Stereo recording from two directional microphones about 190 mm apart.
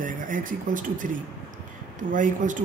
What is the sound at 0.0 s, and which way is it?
Speech, 45° right (ahead or behind).